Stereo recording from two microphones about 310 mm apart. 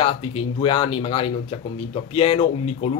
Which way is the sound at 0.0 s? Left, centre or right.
Centre.